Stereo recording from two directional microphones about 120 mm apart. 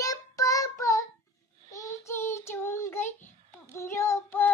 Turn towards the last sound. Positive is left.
turn(degrees=20)  # may be behind; listen again after turning